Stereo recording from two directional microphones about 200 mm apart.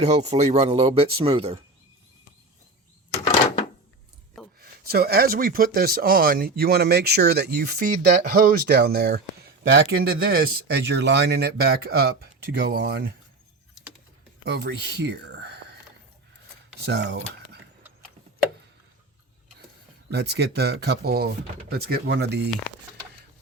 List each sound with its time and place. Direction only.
0.0 s speech: 35° right (ahead or behind)
4.6 s speech: 50° right (ahead or behind)
14.4 s speech: 55° right (ahead or behind)
16.8 s speech: 60° right (ahead or behind)
20.1 s speech: 55° right (ahead or behind)